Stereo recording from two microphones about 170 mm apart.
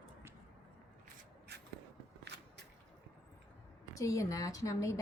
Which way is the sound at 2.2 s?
85° right.